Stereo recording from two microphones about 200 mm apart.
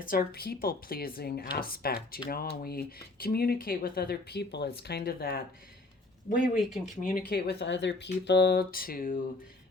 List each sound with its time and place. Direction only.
0.0 s speech: 45° left (ahead or behind)
6.6 s speech: centre (ahead or behind)
6.9 s speech: 45° left (ahead or behind)